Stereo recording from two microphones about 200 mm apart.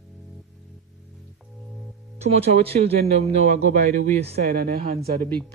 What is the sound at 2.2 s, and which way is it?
A man's voice, 30° right (ahead or behind).